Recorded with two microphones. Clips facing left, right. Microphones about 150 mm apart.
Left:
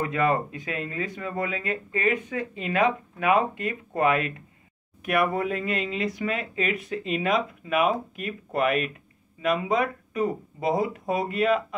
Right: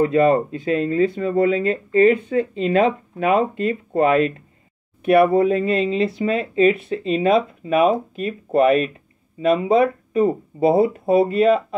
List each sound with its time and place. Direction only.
0.0 s speech: 30° right (ahead or behind)